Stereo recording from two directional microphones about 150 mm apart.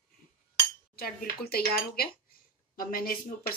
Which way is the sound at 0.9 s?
85° left.